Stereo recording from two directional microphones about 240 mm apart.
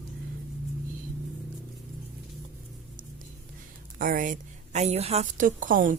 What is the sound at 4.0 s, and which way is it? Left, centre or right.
A woman's voice, right.